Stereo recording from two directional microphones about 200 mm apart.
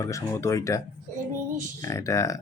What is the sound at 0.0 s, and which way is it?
Speech, 15° left (ahead or behind).